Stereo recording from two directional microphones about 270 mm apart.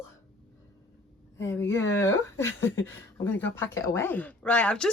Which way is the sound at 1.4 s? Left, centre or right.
Centre.